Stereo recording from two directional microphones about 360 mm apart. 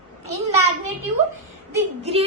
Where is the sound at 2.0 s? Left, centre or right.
Centre.